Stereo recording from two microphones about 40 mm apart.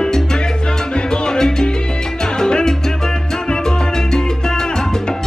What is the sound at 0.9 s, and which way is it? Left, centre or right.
Music, left.